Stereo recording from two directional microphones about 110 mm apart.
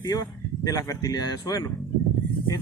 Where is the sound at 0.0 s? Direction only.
35° left (ahead or behind).